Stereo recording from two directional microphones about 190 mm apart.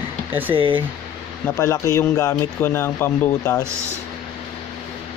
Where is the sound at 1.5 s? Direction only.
15° left (ahead or behind).